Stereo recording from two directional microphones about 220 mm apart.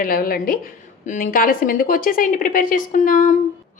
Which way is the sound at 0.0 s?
40° left (ahead or behind).